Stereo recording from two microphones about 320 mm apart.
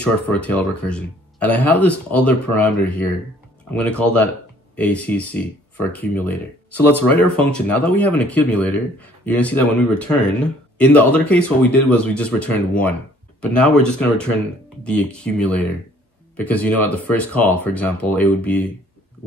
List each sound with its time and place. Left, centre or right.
0.0 s speech: centre